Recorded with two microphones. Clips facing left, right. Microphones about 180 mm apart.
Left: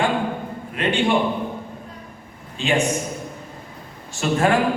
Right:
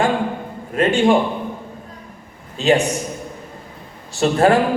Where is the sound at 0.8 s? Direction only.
45° right (ahead or behind).